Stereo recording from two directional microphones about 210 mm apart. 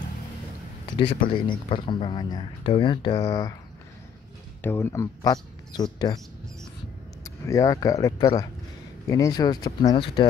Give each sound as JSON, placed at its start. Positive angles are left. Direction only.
{"t": 0.8, "sound": "a sound", "side_deg": 25}
{"t": 1.3, "sound": "speech", "side_deg": 25}
{"t": 4.6, "sound": "speech", "side_deg": 10}
{"t": 7.2, "sound": "speech", "side_deg": 15}